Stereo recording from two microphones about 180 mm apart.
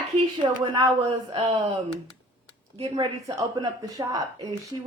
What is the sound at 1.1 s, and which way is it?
Speech, 30° right (ahead or behind).